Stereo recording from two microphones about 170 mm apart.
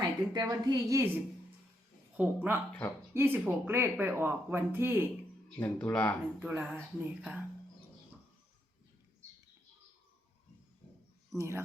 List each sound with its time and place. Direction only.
0.0 s a woman's voice: 20° right (ahead or behind)
5.5 s speech: 10° left (ahead or behind)
6.4 s speech: 10° right (ahead or behind)
11.3 s speech: 15° right (ahead or behind)